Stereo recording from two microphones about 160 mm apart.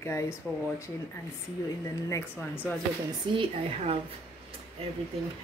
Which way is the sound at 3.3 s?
30° right (ahead or behind).